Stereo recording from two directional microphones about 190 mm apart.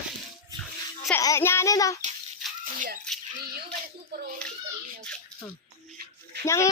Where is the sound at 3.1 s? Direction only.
5° left (ahead or behind).